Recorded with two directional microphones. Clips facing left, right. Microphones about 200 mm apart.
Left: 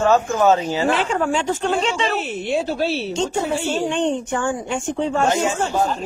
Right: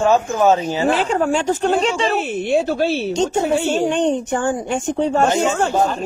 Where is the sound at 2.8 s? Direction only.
55° right (ahead or behind).